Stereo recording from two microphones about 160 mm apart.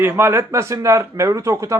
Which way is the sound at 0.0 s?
15° right (ahead or behind).